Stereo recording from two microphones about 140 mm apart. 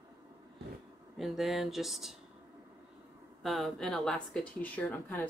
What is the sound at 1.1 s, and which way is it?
Speech, centre (ahead or behind).